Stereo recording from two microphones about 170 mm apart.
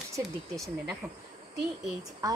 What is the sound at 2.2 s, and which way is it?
Speech, 20° right (ahead or behind).